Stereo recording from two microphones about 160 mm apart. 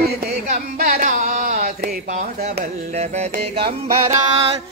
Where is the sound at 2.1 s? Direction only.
50° right (ahead or behind).